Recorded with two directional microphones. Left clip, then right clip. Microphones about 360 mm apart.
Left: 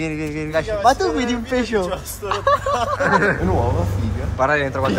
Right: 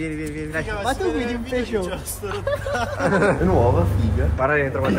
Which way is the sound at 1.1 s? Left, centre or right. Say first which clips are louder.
Left 3 dB; left.